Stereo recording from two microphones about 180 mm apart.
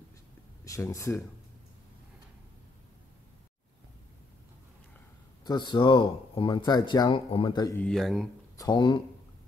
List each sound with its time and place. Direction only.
0.7 s speech: 15° left (ahead or behind)
5.4 s speech: 25° left (ahead or behind)
7.7 s speech: 5° left (ahead or behind)
8.5 s speech: 25° left (ahead or behind)